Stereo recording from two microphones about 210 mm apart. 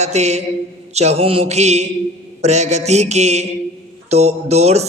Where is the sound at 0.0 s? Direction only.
30° right (ahead or behind).